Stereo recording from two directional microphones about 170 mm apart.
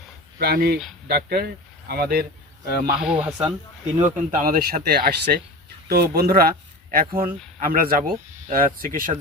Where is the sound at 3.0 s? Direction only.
5° right (ahead or behind).